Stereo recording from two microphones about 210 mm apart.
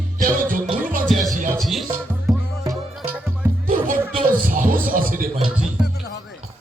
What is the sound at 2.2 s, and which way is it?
Music, 15° right (ahead or behind).